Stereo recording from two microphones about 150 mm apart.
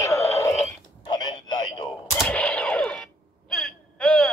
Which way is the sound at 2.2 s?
5° left (ahead or behind).